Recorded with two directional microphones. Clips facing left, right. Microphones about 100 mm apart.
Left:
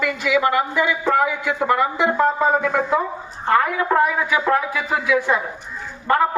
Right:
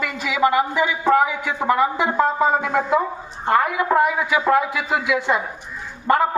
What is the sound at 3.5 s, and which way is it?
A man's voice, 15° right (ahead or behind).